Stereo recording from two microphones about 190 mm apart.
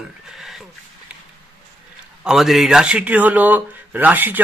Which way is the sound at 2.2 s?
Centre (ahead or behind).